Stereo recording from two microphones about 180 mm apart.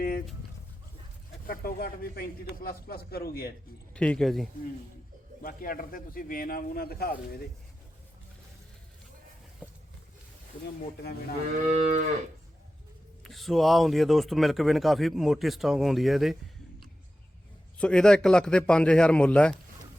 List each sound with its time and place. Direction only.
1.5 s a man's voice: 55° left (ahead or behind)
3.9 s a man's voice: 5° left (ahead or behind)
5.4 s a man's voice: 50° left (ahead or behind)
11.6 s moo: 45° right (ahead or behind)
13.2 s a man's voice: centre (ahead or behind)
17.7 s a man's voice: 5° left (ahead or behind)